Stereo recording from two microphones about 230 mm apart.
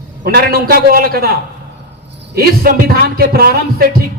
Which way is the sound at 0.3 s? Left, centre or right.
Right.